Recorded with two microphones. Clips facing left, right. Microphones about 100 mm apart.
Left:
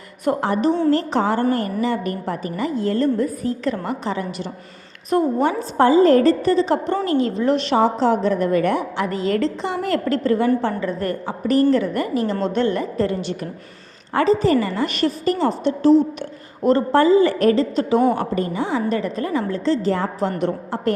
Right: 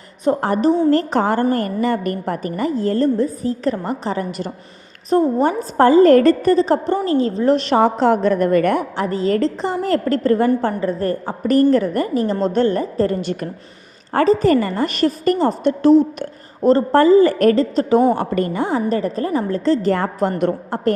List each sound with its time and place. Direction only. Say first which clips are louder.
0.4 s a woman's voice: right 2 dB; 45° right (ahead or behind)
9.0 s a woman's voice: right 4 dB; 35° right (ahead or behind)
18.1 s a woman's voice: right 3 dB; 60° right (ahead or behind)